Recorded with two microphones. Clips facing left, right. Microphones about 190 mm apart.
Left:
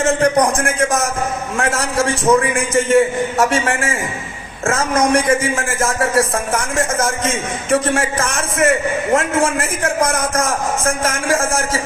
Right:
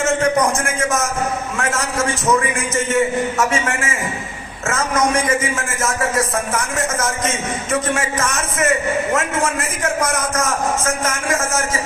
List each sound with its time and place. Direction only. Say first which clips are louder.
0.2 s a man's voice: left 2 dB; 35° left (ahead or behind)